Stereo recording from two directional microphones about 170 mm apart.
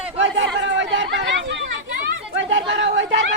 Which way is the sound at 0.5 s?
90° right.